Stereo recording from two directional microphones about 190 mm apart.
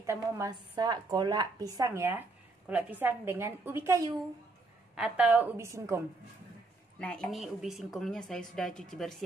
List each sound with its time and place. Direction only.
0.0 s a woman's voice: 15° right (ahead or behind)
7.0 s a woman's voice: 5° left (ahead or behind)